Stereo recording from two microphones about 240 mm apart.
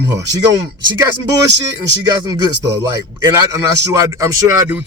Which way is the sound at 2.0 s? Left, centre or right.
Centre.